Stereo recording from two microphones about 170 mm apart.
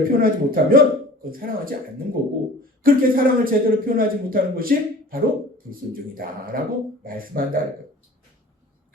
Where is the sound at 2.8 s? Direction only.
60° right (ahead or behind).